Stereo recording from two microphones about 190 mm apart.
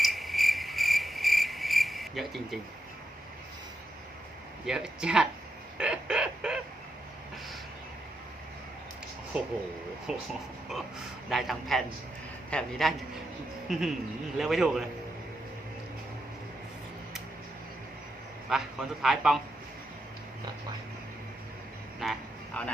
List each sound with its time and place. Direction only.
0.0 s cricket: centre (ahead or behind)
4.6 s speech: 5° right (ahead or behind)
5.7 s a sound: 5° right (ahead or behind)
9.3 s speech: 5° right (ahead or behind)
11.3 s speech: centre (ahead or behind)
13.7 s music: centre (ahead or behind)
14.3 s speech: centre (ahead or behind)
18.4 s a man's voice: centre (ahead or behind)
22.0 s a sound: 5° left (ahead or behind)